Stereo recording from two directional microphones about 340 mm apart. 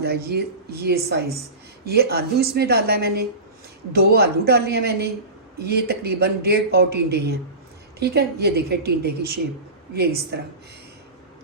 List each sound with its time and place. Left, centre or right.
0.0 s a man's voice: right